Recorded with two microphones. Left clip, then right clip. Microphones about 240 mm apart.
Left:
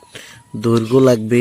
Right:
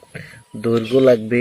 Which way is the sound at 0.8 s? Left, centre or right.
Left.